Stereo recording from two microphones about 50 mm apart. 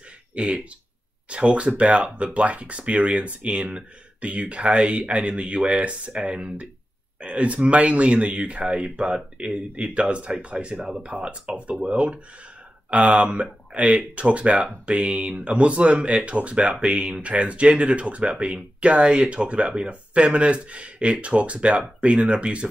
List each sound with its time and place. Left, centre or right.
0.3 s speech: right